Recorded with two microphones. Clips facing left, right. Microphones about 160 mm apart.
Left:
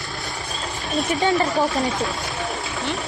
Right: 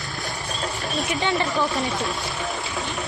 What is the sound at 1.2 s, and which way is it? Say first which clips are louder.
Speech: left 4 dB; 40° left (ahead or behind).